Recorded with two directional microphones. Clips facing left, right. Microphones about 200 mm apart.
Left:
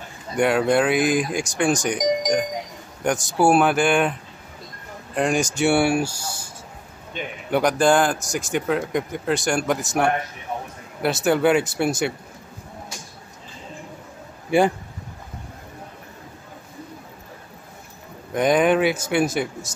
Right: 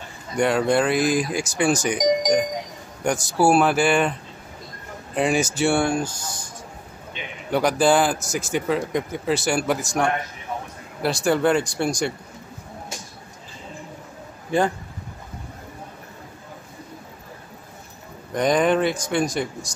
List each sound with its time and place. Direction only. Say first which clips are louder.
0.4 s speech: left 1 dB; centre (ahead or behind)
3.0 s speech: even; centre (ahead or behind)
5.1 s speech: even; 5° right (ahead or behind)
7.2 s speech: left 6 dB; 45° left (ahead or behind)
7.5 s speech: even; centre (ahead or behind)
14.5 s speech: left 3 dB; 10° left (ahead or behind)
18.3 s speech: left 1 dB; 5° left (ahead or behind)